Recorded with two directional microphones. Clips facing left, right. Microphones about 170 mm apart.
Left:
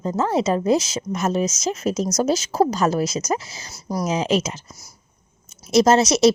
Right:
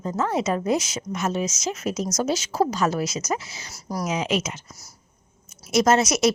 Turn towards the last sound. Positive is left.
turn(degrees=30)  # may be behind; listen again after turning